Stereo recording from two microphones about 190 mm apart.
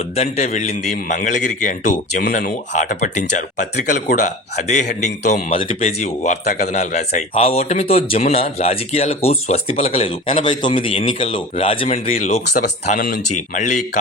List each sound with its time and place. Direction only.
0.2 s speech: 35° left (ahead or behind)
10.4 s speech: 25° left (ahead or behind); by 13.8 s 40° left (ahead or behind)